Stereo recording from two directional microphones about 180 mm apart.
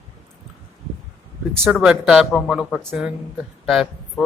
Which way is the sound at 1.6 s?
5° right (ahead or behind).